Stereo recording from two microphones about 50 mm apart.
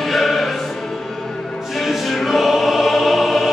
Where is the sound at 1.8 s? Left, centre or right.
Centre.